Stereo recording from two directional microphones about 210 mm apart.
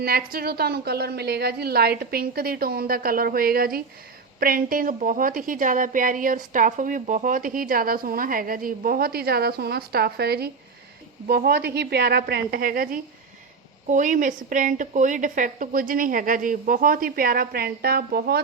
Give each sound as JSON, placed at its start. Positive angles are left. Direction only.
{"t": 0.0, "sound": "a woman's voice", "side_deg": -45}